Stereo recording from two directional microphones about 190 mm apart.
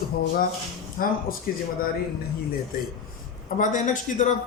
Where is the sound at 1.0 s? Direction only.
50° left (ahead or behind).